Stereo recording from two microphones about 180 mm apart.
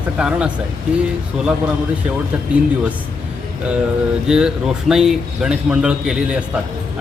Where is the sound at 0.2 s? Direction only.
5° right (ahead or behind).